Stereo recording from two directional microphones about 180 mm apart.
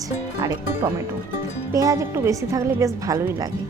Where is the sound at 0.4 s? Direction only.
10° right (ahead or behind).